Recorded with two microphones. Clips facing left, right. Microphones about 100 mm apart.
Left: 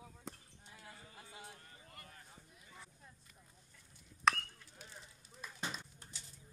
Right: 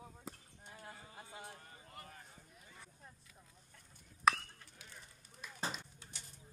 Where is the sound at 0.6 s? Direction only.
45° right (ahead or behind).